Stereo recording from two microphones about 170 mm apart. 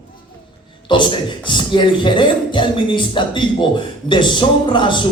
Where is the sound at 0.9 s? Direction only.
30° left (ahead or behind).